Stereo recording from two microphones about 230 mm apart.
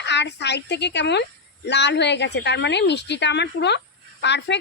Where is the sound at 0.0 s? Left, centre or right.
Left.